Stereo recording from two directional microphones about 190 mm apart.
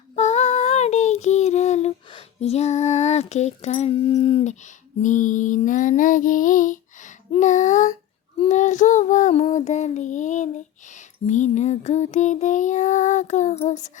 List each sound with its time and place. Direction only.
0.2 s child singing: 35° left (ahead or behind)
2.0 s a sound: 30° left (ahead or behind)
4.1 s female singing: 30° left (ahead or behind)
8.4 s child singing: 40° left (ahead or behind)